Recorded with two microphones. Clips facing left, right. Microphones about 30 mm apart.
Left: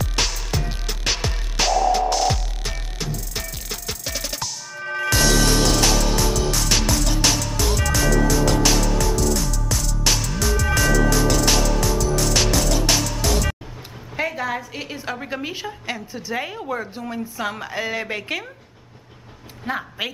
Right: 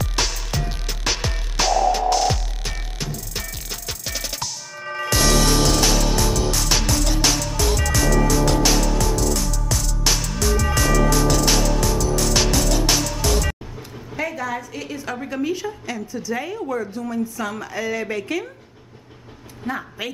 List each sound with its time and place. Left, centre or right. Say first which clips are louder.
0.0 s music: even; centre
14.1 s a sound: left 1 dB; left
15.9 s a woman's voice: even; left
19.6 s a woman's voice: left 1 dB; left